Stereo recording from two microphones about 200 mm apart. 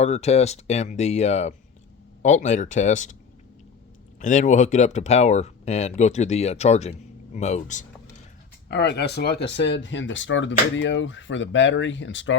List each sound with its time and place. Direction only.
0.0 s speech: 35° left (ahead or behind)
4.2 s speech: 35° left (ahead or behind)
8.7 s speech: 55° left (ahead or behind)